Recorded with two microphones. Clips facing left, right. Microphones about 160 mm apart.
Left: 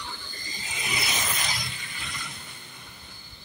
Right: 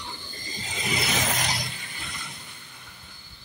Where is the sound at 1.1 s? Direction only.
70° right (ahead or behind).